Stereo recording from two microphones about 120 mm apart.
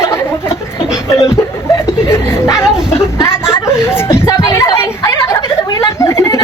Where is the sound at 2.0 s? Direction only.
25° left (ahead or behind).